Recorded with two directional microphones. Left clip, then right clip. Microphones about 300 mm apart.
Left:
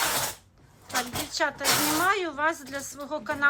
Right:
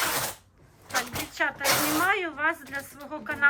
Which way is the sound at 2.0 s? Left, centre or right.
Centre.